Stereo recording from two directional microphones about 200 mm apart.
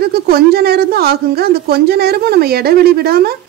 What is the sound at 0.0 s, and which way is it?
Speech, 50° right (ahead or behind).